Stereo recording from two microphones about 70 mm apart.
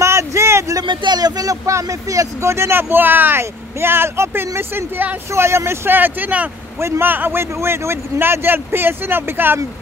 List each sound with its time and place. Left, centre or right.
0.0 s a sound: right
0.7 s speech: right
5.3 s speech: right